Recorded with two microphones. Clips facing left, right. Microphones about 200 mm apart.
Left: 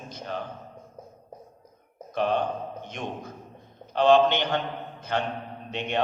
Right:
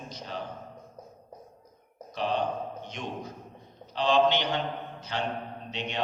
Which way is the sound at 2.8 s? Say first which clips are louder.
Left 2 dB; 55° left (ahead or behind).